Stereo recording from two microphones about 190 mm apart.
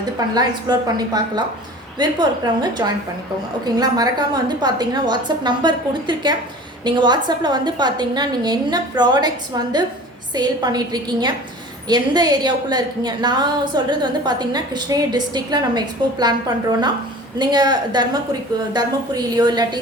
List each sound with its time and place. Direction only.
0.3 s a woman's voice: 20° right (ahead or behind)
17.3 s a woman's voice: 20° right (ahead or behind)